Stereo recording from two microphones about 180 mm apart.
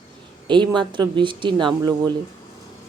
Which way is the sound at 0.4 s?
25° right (ahead or behind).